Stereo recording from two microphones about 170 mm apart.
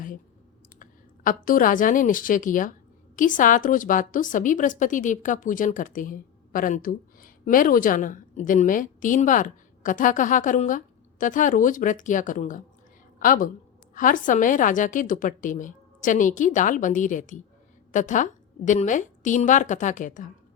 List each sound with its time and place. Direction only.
0.8 s a woman's voice: 55° left (ahead or behind)